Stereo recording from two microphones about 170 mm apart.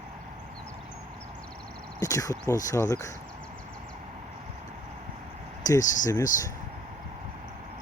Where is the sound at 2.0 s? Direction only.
20° left (ahead or behind).